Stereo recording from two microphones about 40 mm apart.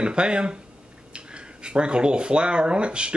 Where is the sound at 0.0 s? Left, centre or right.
Right.